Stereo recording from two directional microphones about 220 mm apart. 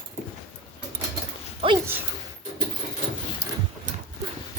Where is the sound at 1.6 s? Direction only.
15° right (ahead or behind).